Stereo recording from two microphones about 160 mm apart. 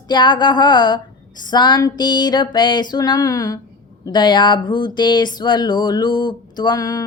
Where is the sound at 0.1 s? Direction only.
30° left (ahead or behind).